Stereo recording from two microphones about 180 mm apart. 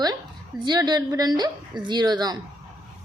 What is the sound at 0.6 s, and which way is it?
A woman's voice, 25° right (ahead or behind).